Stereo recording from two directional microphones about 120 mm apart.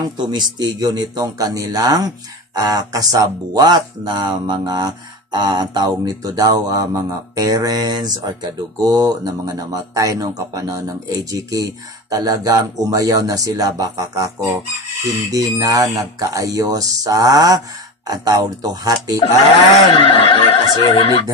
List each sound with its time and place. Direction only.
0.3 s speech: 35° right (ahead or behind)
19.9 s speech: 50° left (ahead or behind)